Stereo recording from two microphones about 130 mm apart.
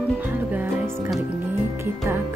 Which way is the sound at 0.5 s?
15° right (ahead or behind).